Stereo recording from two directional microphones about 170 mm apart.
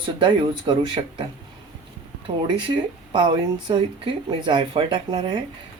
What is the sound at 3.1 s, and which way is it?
Speech, 30° right (ahead or behind).